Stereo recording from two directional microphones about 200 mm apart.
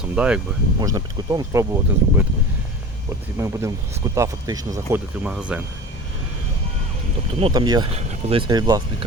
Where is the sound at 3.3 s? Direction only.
15° right (ahead or behind).